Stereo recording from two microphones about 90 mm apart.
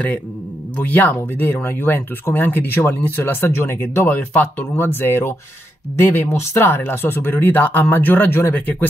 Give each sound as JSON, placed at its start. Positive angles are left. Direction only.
{"t": 0.7, "sound": "speech", "side_deg": 20}